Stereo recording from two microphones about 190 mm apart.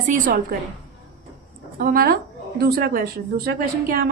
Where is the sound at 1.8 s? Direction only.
50° right (ahead or behind).